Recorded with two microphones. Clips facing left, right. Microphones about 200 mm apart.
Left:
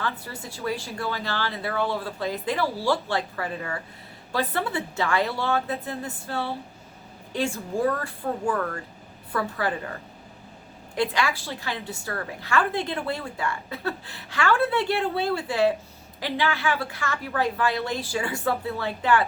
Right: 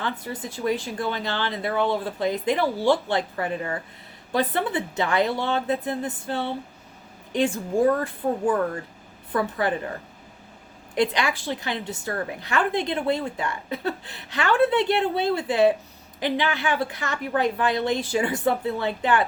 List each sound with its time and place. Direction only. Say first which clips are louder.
0.0 s a woman's voice: right 2 dB; 20° right (ahead or behind)
10.9 s a woman's voice: right 2 dB; 20° right (ahead or behind)